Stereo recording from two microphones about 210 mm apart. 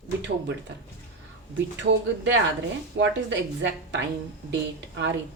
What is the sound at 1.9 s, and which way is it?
A woman's voice, 55° right (ahead or behind).